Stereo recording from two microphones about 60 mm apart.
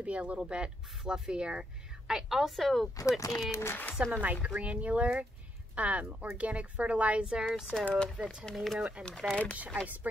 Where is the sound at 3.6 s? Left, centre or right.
Left.